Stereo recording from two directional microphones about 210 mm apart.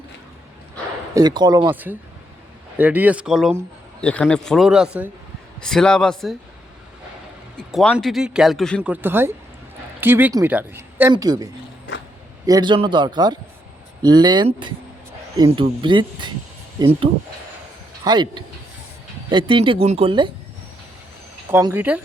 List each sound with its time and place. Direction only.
1.1 s speech: 20° right (ahead or behind)
1.6 s speech: 10° right (ahead or behind)
7.7 s speech: centre (ahead or behind)
8.9 s speech: 10° right (ahead or behind)
12.5 s speech: 20° right (ahead or behind)
21.5 s speech: 10° right (ahead or behind)